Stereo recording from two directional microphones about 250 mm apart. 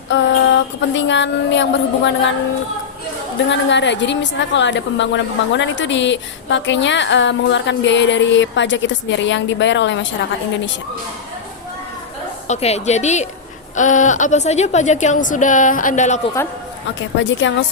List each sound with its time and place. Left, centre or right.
0.1 s a sound: left
3.5 s a woman's voice: left
12.5 s a woman's voice: left
17.2 s a woman's voice: left